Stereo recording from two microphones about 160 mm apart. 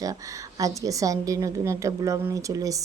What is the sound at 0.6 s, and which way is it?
A woman's voice, 20° right (ahead or behind).